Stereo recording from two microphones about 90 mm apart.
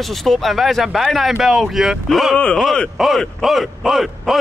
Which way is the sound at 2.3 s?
10° left (ahead or behind).